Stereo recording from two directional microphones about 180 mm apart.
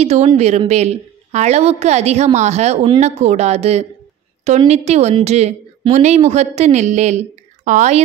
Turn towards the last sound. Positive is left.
turn(degrees=-40)  # may be behind; listen again after turning